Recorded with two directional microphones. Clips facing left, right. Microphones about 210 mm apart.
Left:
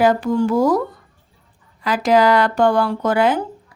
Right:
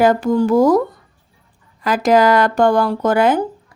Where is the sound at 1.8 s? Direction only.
45° right (ahead or behind).